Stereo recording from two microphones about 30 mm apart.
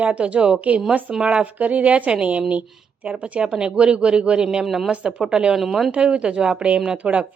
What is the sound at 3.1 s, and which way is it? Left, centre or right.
A woman's voice, right.